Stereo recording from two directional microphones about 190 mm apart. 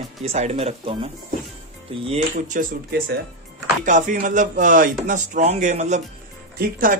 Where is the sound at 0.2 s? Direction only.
35° right (ahead or behind).